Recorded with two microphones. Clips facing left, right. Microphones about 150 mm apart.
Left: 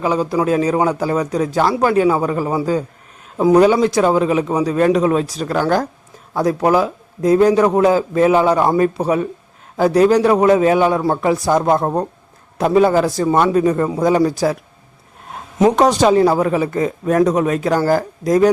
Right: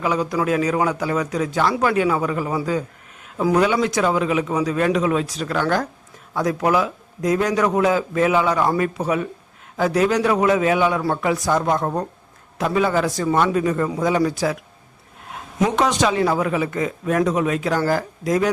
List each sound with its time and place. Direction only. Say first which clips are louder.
0.0 s a man's voice: left 4 dB; 30° left (ahead or behind)
15.6 s a man's voice: left 6 dB; 40° left (ahead or behind)